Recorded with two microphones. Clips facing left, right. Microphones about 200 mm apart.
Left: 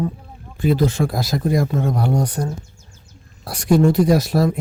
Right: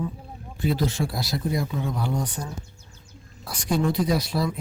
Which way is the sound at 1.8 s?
70° left (ahead or behind).